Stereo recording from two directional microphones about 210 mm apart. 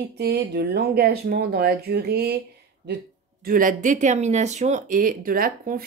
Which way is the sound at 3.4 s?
40° right (ahead or behind).